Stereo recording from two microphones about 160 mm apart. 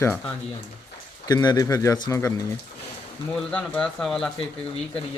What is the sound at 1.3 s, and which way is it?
Speech, 25° left (ahead or behind).